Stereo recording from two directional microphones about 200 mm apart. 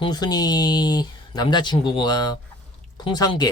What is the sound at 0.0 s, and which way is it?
Speech, 20° left (ahead or behind).